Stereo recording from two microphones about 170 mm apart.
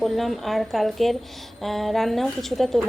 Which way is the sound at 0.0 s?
Centre (ahead or behind).